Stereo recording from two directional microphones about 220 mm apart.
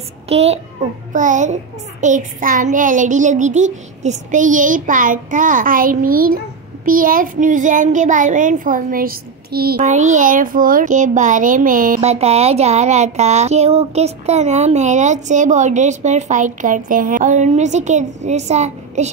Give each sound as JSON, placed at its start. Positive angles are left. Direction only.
{"t": 0.3, "sound": "a child's voice", "side_deg": -30}